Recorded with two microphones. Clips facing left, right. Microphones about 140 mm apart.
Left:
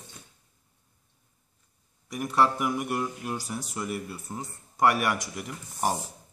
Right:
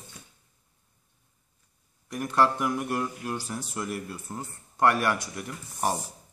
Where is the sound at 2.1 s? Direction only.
5° left (ahead or behind).